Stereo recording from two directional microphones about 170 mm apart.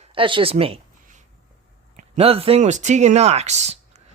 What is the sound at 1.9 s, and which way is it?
Speech, 40° right (ahead or behind).